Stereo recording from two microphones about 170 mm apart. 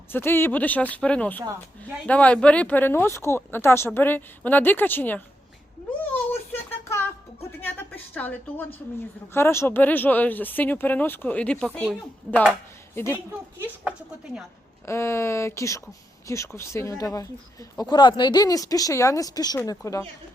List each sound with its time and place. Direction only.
0.1 s speech: 15° left (ahead or behind)
6.0 s a sound: 10° left (ahead or behind)
7.6 s speech: 10° left (ahead or behind)
12.9 s speech: 15° left (ahead or behind)
13.6 s speech: 10° right (ahead or behind)
14.8 s speech: 15° left (ahead or behind)